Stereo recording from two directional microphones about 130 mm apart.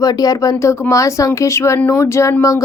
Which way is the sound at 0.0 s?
30° left (ahead or behind).